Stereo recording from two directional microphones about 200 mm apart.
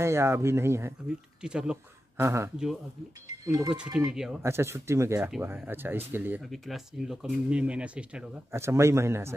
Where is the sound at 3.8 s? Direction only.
5° right (ahead or behind).